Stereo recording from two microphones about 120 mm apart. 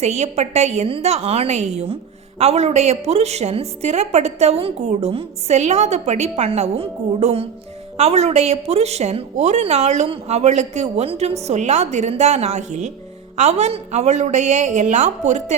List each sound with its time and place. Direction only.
0.0 s a woman's voice: 65° right (ahead or behind)